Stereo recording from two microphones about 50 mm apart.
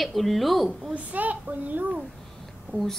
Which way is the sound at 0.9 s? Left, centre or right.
Right.